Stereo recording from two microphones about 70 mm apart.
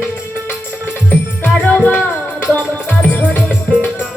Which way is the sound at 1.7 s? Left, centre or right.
Centre.